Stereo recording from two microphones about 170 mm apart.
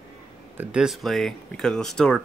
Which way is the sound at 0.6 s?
5° right (ahead or behind).